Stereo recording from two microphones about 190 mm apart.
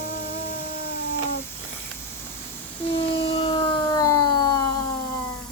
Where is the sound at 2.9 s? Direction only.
30° left (ahead or behind).